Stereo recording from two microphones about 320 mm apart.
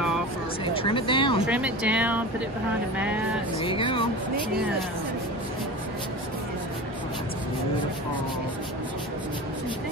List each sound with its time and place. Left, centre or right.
0.8 s speech: centre
1.4 s speech: centre
3.6 s speech: centre